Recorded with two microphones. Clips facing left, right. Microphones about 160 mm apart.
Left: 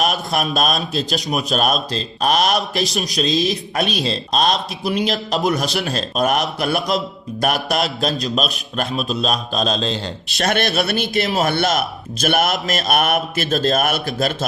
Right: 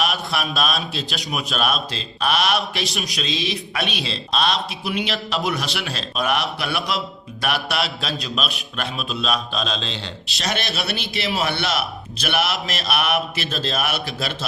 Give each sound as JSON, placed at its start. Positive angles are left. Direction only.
{"t": 0.0, "sound": "a man's voice", "side_deg": 45}